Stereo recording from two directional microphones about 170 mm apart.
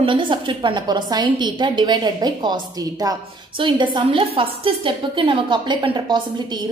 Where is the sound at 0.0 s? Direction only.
30° right (ahead or behind).